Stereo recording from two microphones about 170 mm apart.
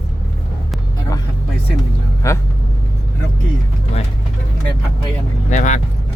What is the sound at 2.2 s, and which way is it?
Speech, 15° left (ahead or behind).